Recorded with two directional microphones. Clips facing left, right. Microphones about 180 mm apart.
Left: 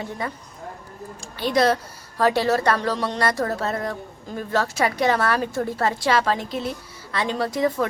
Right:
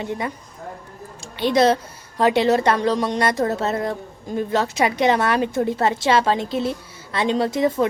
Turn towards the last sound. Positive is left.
turn(degrees=-25)  # may be behind; listen again after turning